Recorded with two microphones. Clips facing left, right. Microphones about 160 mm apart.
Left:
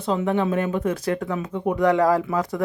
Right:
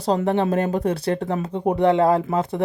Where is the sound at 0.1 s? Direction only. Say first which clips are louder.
Right 1 dB; 40° right (ahead or behind).